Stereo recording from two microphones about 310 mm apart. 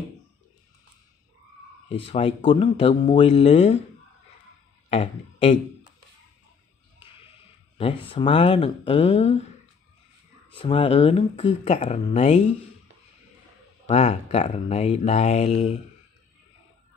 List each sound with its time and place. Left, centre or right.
1.9 s speech: centre
4.8 s a sound: centre
7.7 s speech: centre
10.5 s speech: centre
13.8 s speech: centre